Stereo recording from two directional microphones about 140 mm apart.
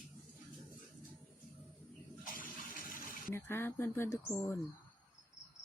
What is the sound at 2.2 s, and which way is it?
Water, 80° left.